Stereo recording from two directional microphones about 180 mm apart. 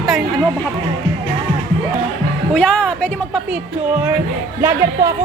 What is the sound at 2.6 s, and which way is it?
Speech, 5° left (ahead or behind).